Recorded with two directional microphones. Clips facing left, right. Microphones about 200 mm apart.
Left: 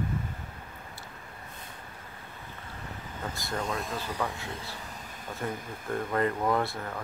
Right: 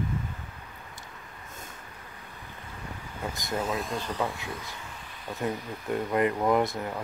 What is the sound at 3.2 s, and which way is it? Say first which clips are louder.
Air conditioning: right 3 dB; 20° right (ahead or behind).